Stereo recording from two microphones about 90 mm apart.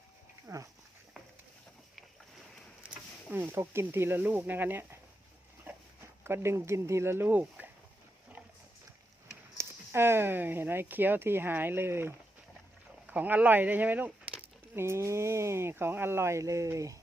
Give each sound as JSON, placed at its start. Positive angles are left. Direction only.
{"t": 0.4, "sound": "dog", "side_deg": -35}
{"t": 3.3, "sound": "speech", "side_deg": -25}
{"t": 5.7, "sound": "a sound", "side_deg": -25}
{"t": 6.2, "sound": "speech", "side_deg": -30}
{"t": 9.6, "sound": "speech", "side_deg": -30}
{"t": 14.8, "sound": "speech", "side_deg": -30}